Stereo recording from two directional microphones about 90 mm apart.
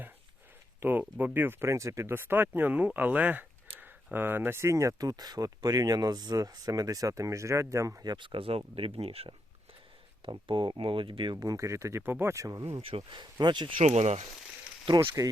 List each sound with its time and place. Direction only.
0.8 s speech: 20° right (ahead or behind)
8.0 s speech: 60° right (ahead or behind); by 9.3 s 90° right
10.2 s speech: 70° right (ahead or behind)
11.3 s speech: 35° right (ahead or behind)
12.8 s speech: 85° right
13.4 s speech: 60° right (ahead or behind)
14.9 s speech: 40° right (ahead or behind)